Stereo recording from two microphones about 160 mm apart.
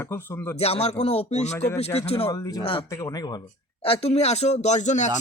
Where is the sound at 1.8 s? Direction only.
40° left (ahead or behind).